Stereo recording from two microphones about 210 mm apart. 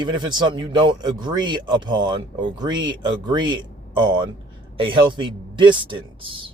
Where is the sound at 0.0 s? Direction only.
20° right (ahead or behind).